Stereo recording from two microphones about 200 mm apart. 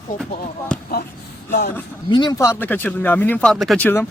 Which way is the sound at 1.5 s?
50° left (ahead or behind).